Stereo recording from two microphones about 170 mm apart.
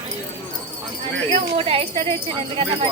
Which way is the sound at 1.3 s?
30° right (ahead or behind).